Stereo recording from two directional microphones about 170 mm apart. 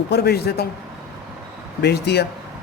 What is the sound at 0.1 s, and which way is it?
Speech, 70° left (ahead or behind).